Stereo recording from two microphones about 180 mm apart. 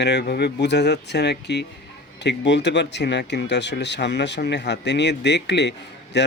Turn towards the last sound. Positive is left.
turn(degrees=75)  # may be behind; listen again after turning